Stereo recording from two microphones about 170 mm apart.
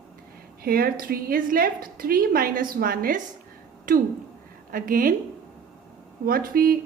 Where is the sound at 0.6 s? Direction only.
60° right (ahead or behind).